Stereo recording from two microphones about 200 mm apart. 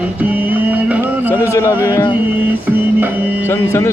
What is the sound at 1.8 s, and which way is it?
Music, 15° left (ahead or behind).